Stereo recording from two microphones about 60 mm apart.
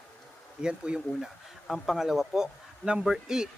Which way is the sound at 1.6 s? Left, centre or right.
Centre.